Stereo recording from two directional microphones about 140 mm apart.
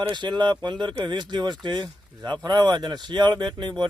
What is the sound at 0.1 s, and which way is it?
Speech, 35° right (ahead or behind).